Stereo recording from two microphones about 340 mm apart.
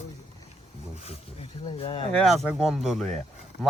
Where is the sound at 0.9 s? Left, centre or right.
Centre.